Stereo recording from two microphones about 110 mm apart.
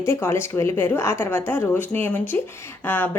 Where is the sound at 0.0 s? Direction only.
20° left (ahead or behind).